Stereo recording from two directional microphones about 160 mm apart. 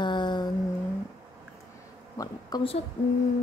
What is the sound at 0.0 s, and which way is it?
Vehicle, 30° left (ahead or behind).